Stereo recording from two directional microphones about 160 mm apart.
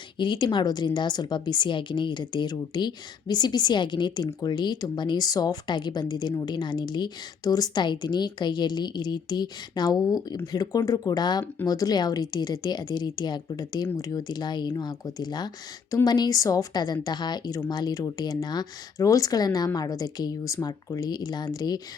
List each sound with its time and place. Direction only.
0.2 s a woman's voice: 30° left (ahead or behind)